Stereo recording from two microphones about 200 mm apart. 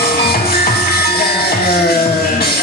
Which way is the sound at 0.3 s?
50° left (ahead or behind).